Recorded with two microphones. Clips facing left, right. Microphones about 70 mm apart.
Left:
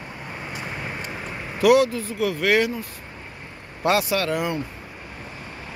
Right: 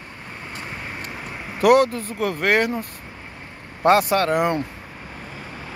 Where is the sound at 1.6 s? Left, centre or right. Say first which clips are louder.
Right 1 dB; right.